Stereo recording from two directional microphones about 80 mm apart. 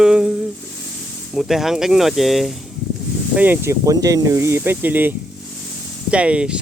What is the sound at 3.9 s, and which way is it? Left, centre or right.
Speech, right.